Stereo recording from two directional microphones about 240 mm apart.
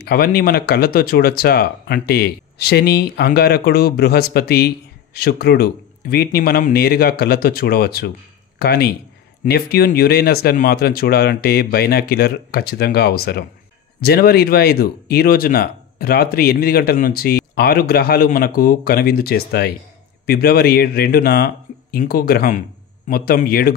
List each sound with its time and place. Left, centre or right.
0.0 s speech: left